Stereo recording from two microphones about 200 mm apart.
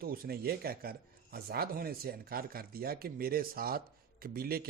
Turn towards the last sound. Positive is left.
turn(degrees=-50)  # may be behind; listen again after turning